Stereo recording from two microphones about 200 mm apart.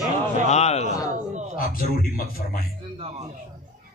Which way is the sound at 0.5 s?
35° left (ahead or behind).